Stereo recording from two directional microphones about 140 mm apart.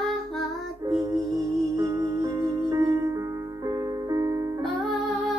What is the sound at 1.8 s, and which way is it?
Music, 25° right (ahead or behind).